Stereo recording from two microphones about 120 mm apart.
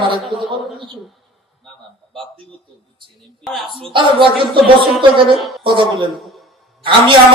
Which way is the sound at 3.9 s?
45° right (ahead or behind).